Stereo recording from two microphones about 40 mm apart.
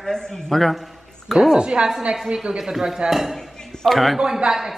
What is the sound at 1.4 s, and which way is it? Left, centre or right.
A woman's voice, right.